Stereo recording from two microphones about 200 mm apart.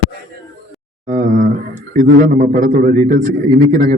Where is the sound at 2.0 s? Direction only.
40° right (ahead or behind).